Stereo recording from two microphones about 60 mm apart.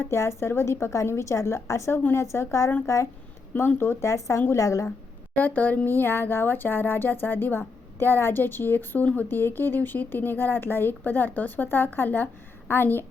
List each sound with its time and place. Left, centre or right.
0.1 s speech: left
3.5 s speech: left
4.0 s speech: left
5.4 s a woman's voice: left